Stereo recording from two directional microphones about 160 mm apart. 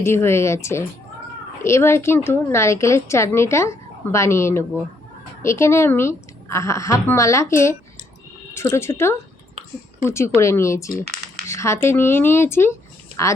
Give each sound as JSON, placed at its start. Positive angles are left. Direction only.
{"t": 0.0, "sound": "a woman's voice", "side_deg": 15}